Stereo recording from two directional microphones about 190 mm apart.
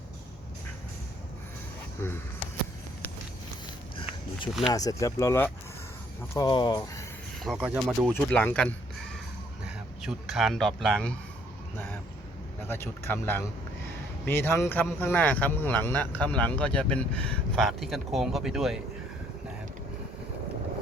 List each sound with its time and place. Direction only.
2.0 s speech: 10° left (ahead or behind)
4.6 s speech: 20° left (ahead or behind)
7.4 s speech: 5° right (ahead or behind)
8.1 s speech: 10° left (ahead or behind)
12.6 s speech: 10° left (ahead or behind)